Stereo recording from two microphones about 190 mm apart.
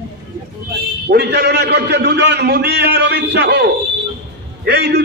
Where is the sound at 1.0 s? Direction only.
60° right (ahead or behind).